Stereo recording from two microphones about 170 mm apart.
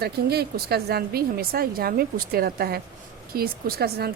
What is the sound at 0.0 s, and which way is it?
Speech, 70° right (ahead or behind).